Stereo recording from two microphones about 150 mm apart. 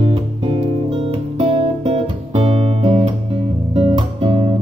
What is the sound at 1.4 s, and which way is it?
Guitar, 35° right (ahead or behind).